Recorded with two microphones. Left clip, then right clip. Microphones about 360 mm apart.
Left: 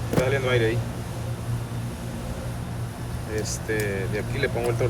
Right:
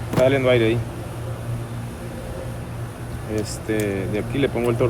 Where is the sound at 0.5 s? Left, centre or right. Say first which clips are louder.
Right 4 dB; centre.